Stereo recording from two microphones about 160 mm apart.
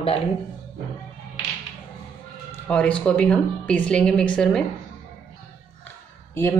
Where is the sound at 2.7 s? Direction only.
10° left (ahead or behind).